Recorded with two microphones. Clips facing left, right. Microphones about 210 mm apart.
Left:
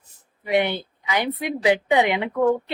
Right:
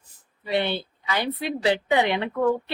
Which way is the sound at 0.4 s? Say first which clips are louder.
Left 3 dB; 15° left (ahead or behind).